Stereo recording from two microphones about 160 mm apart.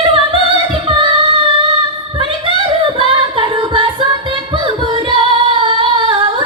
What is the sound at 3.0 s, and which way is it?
Music, 35° right (ahead or behind).